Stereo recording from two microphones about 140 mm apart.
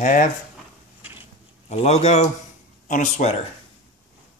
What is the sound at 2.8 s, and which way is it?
Speech, 65° left (ahead or behind).